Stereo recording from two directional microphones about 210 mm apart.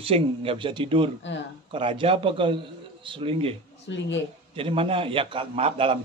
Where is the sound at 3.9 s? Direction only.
55° left (ahead or behind).